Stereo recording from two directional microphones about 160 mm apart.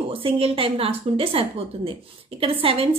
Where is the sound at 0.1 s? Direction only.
35° right (ahead or behind).